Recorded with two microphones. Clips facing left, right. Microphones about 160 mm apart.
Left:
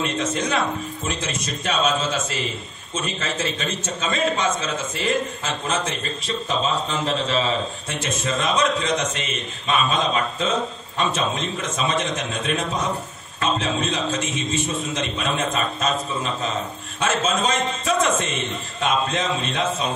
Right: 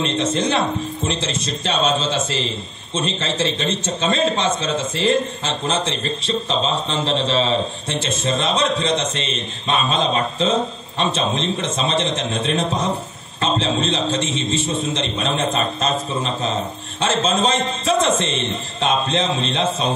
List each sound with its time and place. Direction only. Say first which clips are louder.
0.0 s a man's voice: right 4 dB; 25° right (ahead or behind)